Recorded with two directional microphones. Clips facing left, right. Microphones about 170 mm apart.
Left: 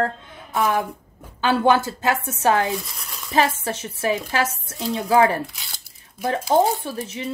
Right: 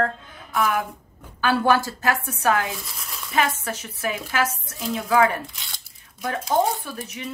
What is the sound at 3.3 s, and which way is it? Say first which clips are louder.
Speech: left 3 dB; 30° left (ahead or behind).